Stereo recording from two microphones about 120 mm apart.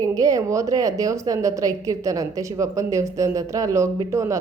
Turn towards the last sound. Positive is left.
turn(degrees=-25)  # may be behind; listen again after turning